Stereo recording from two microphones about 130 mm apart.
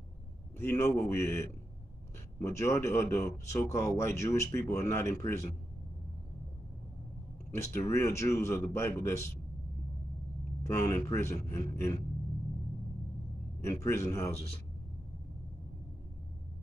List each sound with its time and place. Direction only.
0.6 s speech: 20° left (ahead or behind)
7.5 s speech: 20° left (ahead or behind)
10.7 s speech: 25° left (ahead or behind)
13.6 s speech: 20° left (ahead or behind)